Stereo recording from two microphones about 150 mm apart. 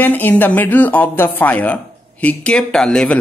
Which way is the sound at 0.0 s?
10° left (ahead or behind).